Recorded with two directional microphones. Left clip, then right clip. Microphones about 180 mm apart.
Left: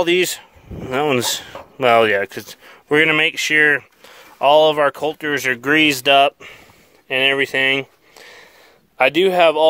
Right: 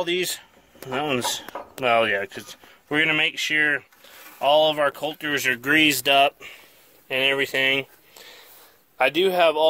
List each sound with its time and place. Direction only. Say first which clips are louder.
0.0 s speech: left 8 dB; 50° left (ahead or behind)
7.1 s a sound: left 5 dB; 40° left (ahead or behind)
8.9 s speech: left 5 dB; 50° left (ahead or behind)